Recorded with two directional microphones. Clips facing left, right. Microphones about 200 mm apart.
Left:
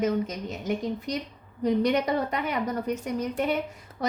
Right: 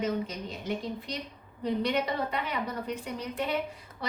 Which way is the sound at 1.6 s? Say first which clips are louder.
Left 5 dB; 40° left (ahead or behind).